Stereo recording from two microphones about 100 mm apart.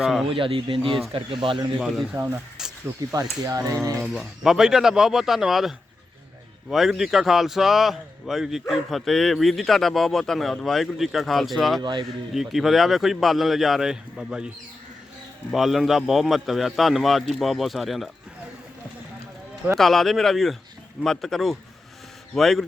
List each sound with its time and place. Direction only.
0.0 s a man's voice: 5° right (ahead or behind)
0.3 s speech: 60° right (ahead or behind)
2.2 s speech: 30° right (ahead or behind)
4.0 s a man's voice: centre (ahead or behind)
11.8 s a man's voice: 50° right (ahead or behind)
12.3 s a man's voice: centre (ahead or behind)
15.5 s a man's voice: centre (ahead or behind)
19.7 s a man's voice: centre (ahead or behind)